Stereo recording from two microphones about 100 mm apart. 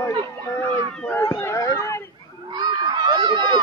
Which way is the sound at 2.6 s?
45° right (ahead or behind).